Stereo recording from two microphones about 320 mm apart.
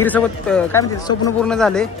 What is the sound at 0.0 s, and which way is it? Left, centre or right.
Speech, centre.